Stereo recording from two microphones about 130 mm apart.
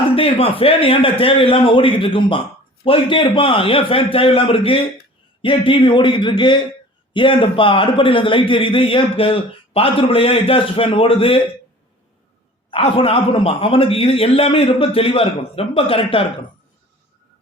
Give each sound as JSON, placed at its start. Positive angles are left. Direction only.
{"t": 0.2, "sound": "a man's voice", "side_deg": 45}
{"t": 12.7, "sound": "a man's voice", "side_deg": 45}